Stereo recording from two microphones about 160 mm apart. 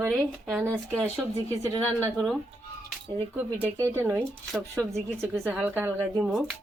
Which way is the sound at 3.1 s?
30° right (ahead or behind).